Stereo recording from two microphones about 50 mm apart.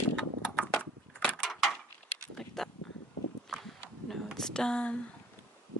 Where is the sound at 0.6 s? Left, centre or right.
Left.